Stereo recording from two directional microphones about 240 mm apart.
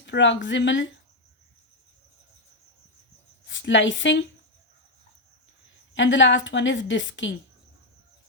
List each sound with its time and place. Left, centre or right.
0.0 s a woman's voice: left
3.4 s speech: left
5.9 s a woman's voice: left